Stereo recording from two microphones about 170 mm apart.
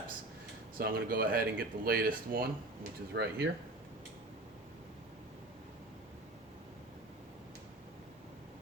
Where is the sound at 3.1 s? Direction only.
80° right.